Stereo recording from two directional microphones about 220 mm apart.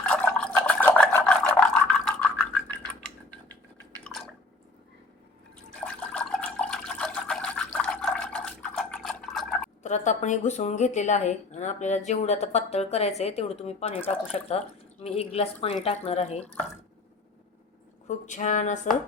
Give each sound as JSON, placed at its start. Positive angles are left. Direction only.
{"t": 0.0, "sound": "toothbrush", "side_deg": 5}
{"t": 5.8, "sound": "water", "side_deg": 5}
{"t": 9.8, "sound": "speech", "side_deg": 35}
{"t": 18.1, "sound": "speech", "side_deg": 35}